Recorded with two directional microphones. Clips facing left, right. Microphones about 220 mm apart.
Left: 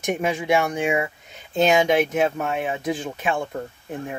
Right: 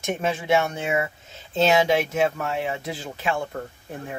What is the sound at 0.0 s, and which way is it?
Speech, 15° left (ahead or behind).